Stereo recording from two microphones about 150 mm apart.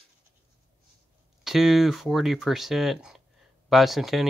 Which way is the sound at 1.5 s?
Centre (ahead or behind).